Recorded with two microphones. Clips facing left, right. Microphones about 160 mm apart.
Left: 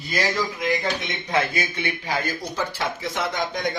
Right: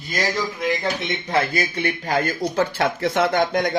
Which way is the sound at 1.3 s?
40° right (ahead or behind).